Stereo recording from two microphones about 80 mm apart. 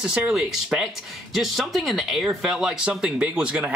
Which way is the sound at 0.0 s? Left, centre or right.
Centre.